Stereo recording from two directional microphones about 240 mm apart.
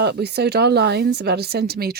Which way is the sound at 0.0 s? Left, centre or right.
Right.